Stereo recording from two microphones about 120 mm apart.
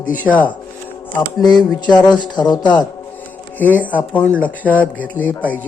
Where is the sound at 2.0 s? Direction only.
40° left (ahead or behind).